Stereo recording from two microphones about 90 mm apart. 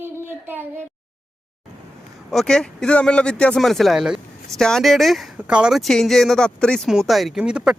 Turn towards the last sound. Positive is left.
turn(degrees=-10)  # may be behind; listen again after turning